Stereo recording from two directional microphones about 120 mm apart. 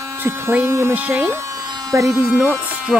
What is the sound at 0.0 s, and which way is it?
Speech, 20° right (ahead or behind).